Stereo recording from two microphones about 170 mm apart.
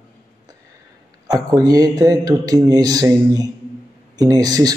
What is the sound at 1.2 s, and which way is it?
Speech, 20° right (ahead or behind).